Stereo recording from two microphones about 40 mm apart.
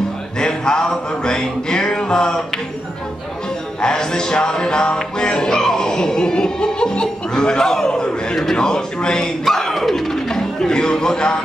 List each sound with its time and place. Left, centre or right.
0.4 s music: centre
3.8 s music: centre
5.2 s chuckle: centre
8.4 s music: centre
9.4 s a sound: centre